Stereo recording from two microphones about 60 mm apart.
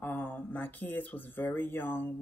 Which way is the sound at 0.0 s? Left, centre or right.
Left.